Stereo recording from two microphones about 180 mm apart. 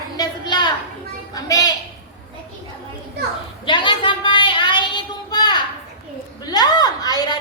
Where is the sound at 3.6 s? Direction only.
25° left (ahead or behind).